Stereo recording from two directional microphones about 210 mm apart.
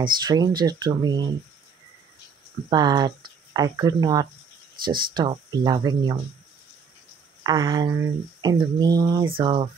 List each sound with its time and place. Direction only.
0.0 s speech: 20° right (ahead or behind)
2.7 s speech: 20° right (ahead or behind)
4.8 s speech: 45° right (ahead or behind)
5.1 s speech: 20° right (ahead or behind)
7.4 s speech: 15° right (ahead or behind)